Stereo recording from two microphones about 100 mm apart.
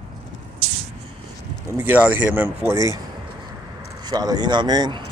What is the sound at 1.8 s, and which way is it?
Speech, 20° right (ahead or behind).